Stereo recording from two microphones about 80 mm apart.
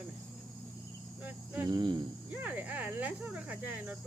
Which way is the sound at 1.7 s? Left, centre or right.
Right.